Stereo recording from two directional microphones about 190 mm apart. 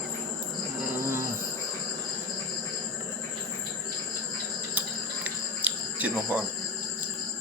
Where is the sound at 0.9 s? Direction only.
15° right (ahead or behind).